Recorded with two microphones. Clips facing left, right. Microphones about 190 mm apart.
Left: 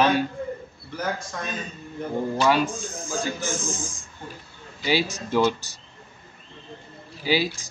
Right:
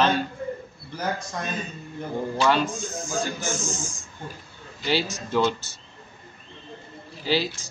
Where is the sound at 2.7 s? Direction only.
35° left (ahead or behind).